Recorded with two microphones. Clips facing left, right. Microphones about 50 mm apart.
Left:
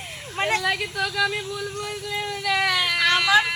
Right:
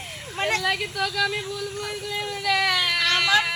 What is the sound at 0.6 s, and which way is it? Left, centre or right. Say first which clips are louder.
Speech: even; centre.